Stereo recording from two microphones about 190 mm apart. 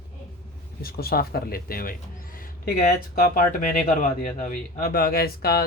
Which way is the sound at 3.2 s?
50° left (ahead or behind).